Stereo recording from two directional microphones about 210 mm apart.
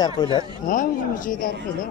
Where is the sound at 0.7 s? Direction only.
40° left (ahead or behind).